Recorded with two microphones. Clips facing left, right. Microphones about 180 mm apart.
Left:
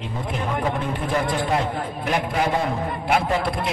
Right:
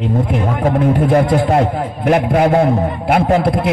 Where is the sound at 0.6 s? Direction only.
55° right (ahead or behind).